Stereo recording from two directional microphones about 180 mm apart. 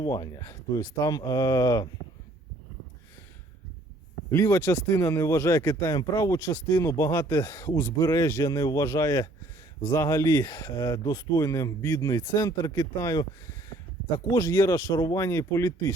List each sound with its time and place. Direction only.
0.0 s speech: 20° left (ahead or behind)
4.3 s speech: 15° left (ahead or behind)
14.3 s speech: 20° left (ahead or behind)